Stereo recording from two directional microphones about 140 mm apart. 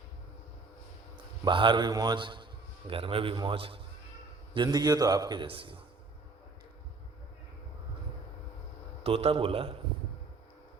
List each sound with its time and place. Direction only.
1.1 s a man's voice: 35° right (ahead or behind)
9.0 s a man's voice: 40° right (ahead or behind)